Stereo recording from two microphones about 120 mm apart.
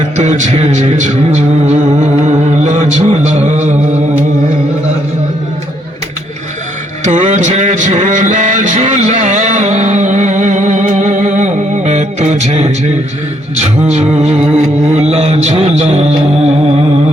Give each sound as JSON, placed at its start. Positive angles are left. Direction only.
{"t": 0.2, "sound": "music", "side_deg": -75}
{"t": 7.0, "sound": "a sound", "side_deg": -85}
{"t": 13.8, "sound": "music", "side_deg": -65}